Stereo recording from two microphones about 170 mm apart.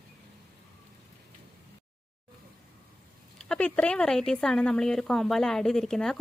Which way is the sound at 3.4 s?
5° left (ahead or behind).